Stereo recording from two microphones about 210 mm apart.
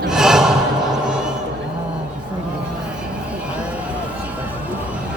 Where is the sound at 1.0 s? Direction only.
5° right (ahead or behind).